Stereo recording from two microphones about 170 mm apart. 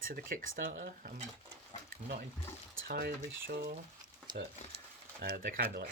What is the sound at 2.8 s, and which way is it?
Speech, 65° right (ahead or behind).